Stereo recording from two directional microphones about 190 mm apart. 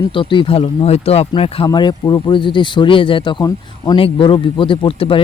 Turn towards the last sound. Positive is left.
turn(degrees=30)  # may be behind; listen again after turning